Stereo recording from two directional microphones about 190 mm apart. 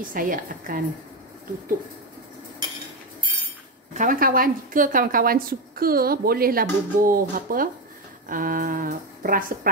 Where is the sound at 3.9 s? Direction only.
45° right (ahead or behind).